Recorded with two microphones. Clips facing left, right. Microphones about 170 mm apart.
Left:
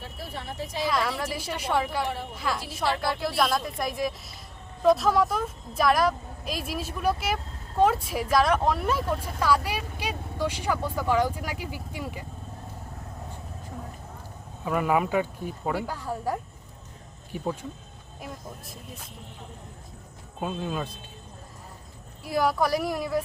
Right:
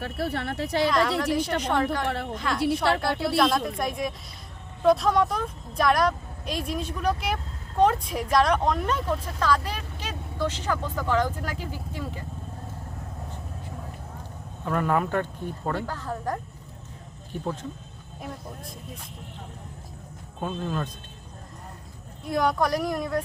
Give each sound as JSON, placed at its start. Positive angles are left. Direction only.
{"t": 0.0, "sound": "speech", "side_deg": -70}
{"t": 0.9, "sound": "speech", "side_deg": 5}
{"t": 14.6, "sound": "speech", "side_deg": 10}
{"t": 20.4, "sound": "speech", "side_deg": 10}
{"t": 22.2, "sound": "speech", "side_deg": 5}